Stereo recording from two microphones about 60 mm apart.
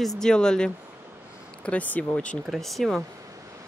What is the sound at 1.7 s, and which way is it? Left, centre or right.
Speech, left.